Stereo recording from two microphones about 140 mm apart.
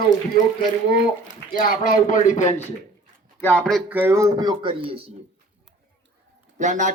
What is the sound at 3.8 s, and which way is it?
Speech, 15° right (ahead or behind).